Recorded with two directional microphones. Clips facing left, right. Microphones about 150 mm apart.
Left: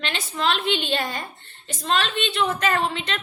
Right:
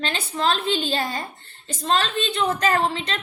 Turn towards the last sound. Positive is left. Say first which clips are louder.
# right 2 dB
turn(degrees=-35)  # may be behind; listen again after turning